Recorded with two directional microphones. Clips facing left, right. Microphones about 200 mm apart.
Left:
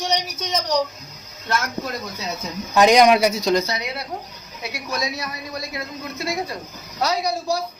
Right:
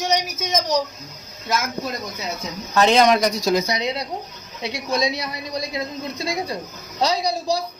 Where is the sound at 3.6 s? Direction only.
20° right (ahead or behind).